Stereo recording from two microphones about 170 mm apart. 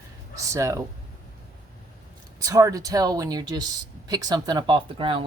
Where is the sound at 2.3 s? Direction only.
20° right (ahead or behind).